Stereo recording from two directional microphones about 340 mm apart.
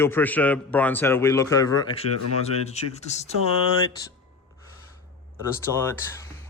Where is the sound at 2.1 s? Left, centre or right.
Left.